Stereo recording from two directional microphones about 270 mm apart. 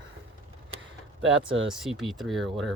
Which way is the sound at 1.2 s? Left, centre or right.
Right.